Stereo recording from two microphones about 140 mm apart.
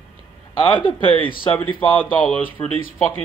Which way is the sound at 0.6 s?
40° left (ahead or behind).